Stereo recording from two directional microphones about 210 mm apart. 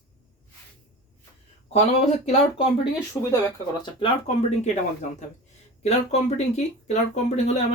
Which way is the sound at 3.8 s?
25° left (ahead or behind).